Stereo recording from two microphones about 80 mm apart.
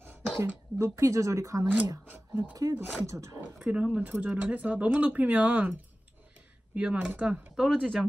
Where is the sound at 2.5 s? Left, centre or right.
Right.